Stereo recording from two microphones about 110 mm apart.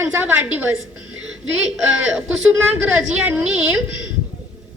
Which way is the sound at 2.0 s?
10° right (ahead or behind).